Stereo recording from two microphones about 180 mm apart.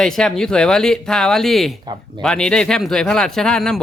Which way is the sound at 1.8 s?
25° right (ahead or behind).